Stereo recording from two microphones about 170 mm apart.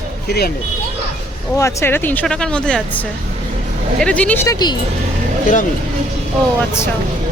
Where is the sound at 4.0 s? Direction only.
10° left (ahead or behind).